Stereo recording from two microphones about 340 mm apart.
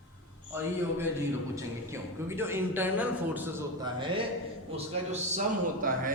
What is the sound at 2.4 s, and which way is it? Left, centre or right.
A man's voice, centre.